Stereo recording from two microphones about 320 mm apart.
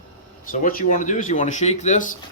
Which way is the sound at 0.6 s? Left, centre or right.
Left.